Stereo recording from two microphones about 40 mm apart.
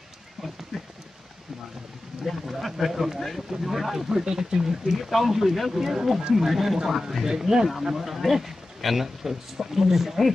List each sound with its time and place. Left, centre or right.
2.2 s speech: centre
4.1 s speech: centre
4.9 s speech: centre